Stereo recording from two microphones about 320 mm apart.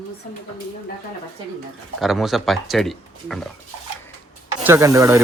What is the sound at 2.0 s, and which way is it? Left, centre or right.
Speech, centre.